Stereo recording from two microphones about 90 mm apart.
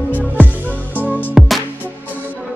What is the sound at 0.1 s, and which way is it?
Music, 15° left (ahead or behind).